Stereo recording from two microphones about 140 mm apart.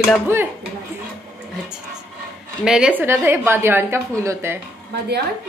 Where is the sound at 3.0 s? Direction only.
15° right (ahead or behind).